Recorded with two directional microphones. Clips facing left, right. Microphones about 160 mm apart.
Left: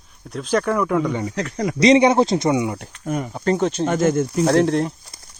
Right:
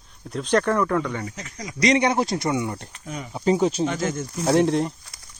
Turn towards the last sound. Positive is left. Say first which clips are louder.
# left 2 dB
turn(degrees=0)  # may be behind; listen again after turning